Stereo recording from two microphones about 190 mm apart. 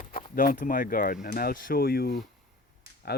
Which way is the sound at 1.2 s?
50° left (ahead or behind).